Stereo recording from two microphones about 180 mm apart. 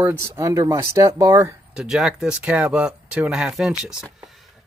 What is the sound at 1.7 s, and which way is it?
Speech, 5° right (ahead or behind).